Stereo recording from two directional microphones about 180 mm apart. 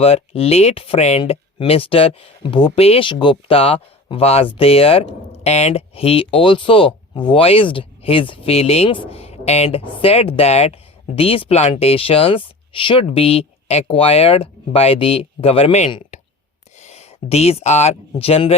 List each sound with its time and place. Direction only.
0.0 s speech: 35° left (ahead or behind)
15.9 s a sound: 30° left (ahead or behind)
16.8 s speech: 35° left (ahead or behind)